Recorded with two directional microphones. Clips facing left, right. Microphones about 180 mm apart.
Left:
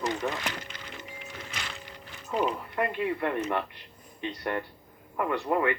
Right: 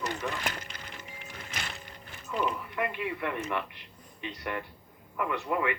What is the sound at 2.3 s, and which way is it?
A man's voice, 40° left (ahead or behind).